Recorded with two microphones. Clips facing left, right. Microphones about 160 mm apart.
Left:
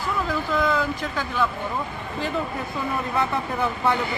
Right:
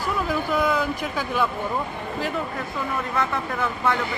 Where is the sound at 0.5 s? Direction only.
10° right (ahead or behind).